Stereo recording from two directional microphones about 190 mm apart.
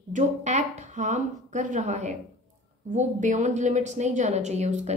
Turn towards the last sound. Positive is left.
turn(degrees=-35)  # may be behind; listen again after turning